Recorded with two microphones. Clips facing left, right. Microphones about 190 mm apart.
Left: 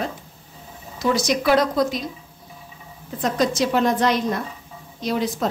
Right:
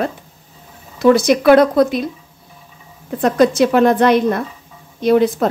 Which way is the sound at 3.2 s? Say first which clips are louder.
Right 8 dB; 60° right (ahead or behind).